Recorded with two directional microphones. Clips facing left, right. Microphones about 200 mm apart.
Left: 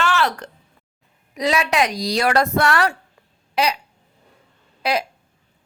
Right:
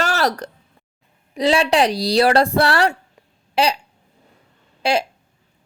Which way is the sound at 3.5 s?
30° right (ahead or behind).